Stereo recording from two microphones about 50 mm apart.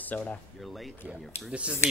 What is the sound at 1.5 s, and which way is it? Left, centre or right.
Speech, right.